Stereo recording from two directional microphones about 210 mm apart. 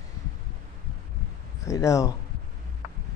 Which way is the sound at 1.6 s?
15° left (ahead or behind).